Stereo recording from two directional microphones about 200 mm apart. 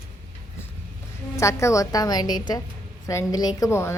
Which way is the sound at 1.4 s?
15° left (ahead or behind).